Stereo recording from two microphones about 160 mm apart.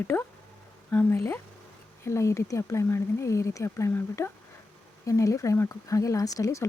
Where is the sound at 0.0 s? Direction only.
15° left (ahead or behind).